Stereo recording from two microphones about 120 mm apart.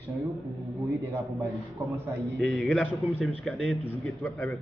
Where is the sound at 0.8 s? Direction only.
25° right (ahead or behind).